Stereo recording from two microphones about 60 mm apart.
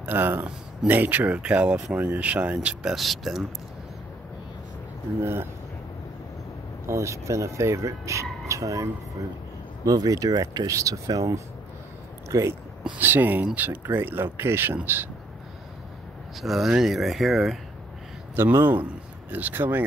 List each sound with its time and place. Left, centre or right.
0.0 s speech: right
2.8 s speech: centre
5.2 s speech: right
6.9 s speech: right
9.8 s speech: right
12.9 s speech: right
16.3 s speech: centre
18.3 s speech: right